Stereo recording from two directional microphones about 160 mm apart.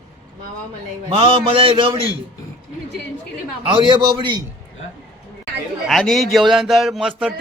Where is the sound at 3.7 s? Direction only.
30° right (ahead or behind).